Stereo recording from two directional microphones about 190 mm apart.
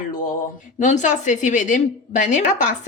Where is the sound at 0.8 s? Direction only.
40° left (ahead or behind).